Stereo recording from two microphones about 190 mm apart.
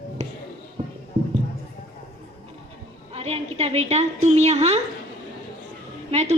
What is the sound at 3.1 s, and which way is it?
A woman's voice, 30° right (ahead or behind).